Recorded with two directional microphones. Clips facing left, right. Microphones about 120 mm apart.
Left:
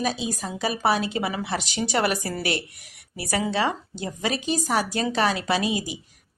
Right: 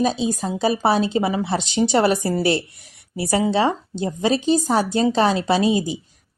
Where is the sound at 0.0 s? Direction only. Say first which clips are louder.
Right 6 dB; 25° right (ahead or behind).